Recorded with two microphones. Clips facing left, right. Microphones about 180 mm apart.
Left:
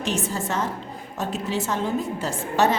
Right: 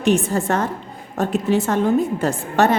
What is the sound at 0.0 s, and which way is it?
A woman's voice, 55° right (ahead or behind).